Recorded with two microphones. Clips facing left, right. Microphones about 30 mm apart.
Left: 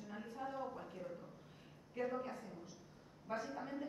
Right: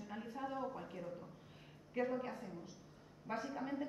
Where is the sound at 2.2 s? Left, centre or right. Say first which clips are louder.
Right 1 dB; centre.